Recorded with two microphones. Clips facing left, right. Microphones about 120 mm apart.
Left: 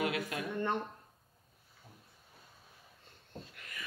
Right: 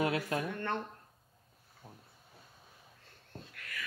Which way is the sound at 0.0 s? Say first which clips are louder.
Right 3 dB; 30° right (ahead or behind).